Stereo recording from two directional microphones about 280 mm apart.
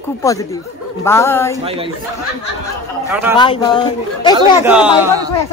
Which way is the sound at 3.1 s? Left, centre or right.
Centre.